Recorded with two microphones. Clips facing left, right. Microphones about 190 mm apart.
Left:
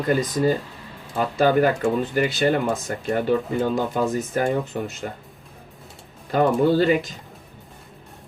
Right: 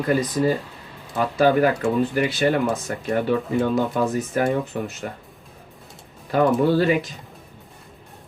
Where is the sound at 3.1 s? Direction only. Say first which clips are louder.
Even; 30° left (ahead or behind).